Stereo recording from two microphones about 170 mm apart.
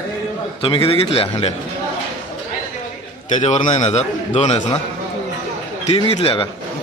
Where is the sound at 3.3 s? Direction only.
40° left (ahead or behind).